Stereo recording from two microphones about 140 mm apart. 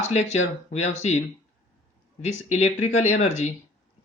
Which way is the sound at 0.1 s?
50° left (ahead or behind).